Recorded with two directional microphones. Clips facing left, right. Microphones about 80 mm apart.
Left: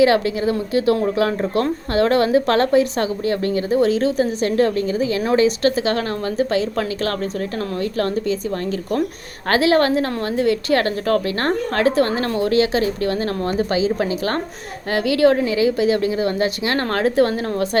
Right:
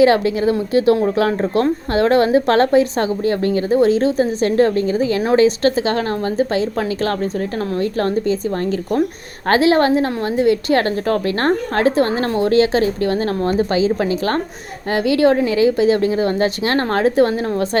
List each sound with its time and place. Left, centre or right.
0.0 s a woman's voice: right